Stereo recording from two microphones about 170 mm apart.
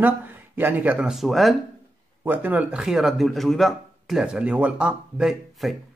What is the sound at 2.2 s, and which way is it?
A man's voice, 10° right (ahead or behind).